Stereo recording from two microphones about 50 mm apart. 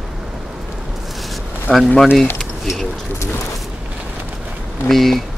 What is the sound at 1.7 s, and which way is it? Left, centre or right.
Speech, centre.